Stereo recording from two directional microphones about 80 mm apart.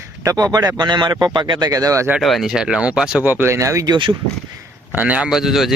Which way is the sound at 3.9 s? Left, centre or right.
Right.